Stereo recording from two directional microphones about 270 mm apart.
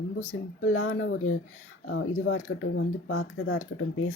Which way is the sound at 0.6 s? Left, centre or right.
Left.